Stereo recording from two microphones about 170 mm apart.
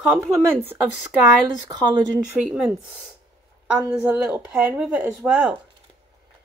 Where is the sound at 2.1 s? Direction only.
5° right (ahead or behind).